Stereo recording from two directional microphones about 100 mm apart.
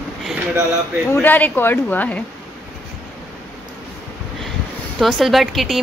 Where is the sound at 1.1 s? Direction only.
20° left (ahead or behind).